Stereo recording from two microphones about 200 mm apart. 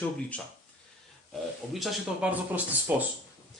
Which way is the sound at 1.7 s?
5° right (ahead or behind).